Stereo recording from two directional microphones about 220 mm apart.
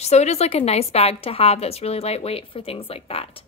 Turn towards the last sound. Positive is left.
turn(degrees=25)  # may be behind; listen again after turning